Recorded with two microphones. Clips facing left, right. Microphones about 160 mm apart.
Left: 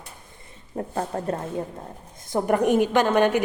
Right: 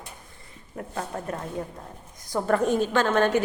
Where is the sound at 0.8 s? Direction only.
35° left (ahead or behind).